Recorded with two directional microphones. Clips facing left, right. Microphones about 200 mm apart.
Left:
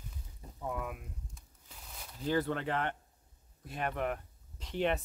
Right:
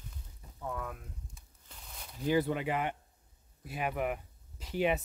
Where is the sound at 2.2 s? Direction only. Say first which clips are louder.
Right 2 dB; 10° right (ahead or behind).